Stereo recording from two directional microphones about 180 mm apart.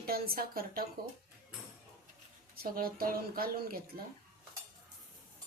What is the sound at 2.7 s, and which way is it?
Speech, 55° right (ahead or behind).